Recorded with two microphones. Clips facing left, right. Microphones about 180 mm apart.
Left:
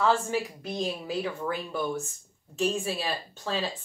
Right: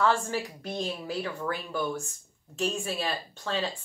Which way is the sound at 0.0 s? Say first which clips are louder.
Left 1 dB; centre (ahead or behind).